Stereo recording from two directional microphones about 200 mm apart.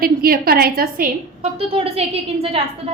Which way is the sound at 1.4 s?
30° right (ahead or behind).